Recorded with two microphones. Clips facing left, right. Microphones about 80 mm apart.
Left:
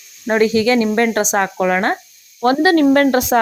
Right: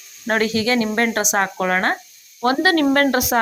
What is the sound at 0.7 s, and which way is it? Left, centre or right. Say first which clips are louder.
Speech: left 4 dB; right.